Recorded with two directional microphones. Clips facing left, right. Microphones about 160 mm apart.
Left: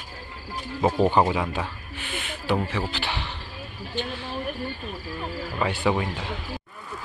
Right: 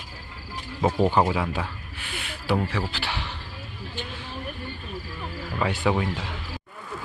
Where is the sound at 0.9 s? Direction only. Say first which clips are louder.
Left 1 dB; 20° left (ahead or behind).